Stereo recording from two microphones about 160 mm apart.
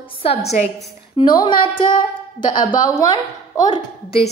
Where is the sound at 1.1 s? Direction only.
30° left (ahead or behind).